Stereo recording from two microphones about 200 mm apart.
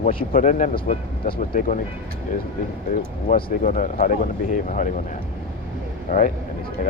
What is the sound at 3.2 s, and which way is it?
Speech, 45° left (ahead or behind).